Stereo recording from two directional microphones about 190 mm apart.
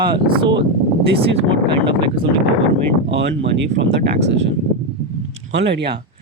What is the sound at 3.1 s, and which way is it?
Speech, 70° right (ahead or behind).